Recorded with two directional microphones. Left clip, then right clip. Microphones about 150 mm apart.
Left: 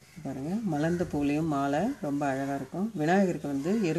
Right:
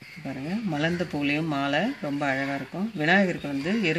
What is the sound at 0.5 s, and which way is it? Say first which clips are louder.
Speech: right 2 dB; 15° right (ahead or behind).